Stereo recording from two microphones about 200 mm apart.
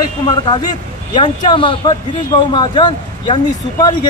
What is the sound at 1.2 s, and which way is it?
Speech, 25° left (ahead or behind).